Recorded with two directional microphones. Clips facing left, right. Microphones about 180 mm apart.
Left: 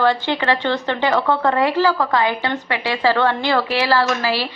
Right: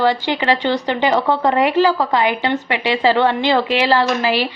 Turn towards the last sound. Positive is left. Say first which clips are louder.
# right 2 dB
turn(degrees=-20)  # may be behind; listen again after turning